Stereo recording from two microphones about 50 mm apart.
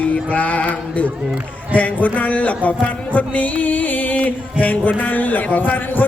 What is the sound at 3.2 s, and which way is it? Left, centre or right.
Music, left.